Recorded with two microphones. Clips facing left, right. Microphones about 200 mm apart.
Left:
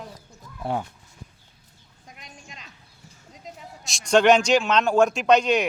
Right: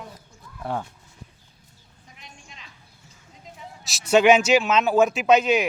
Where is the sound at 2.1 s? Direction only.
45° left (ahead or behind).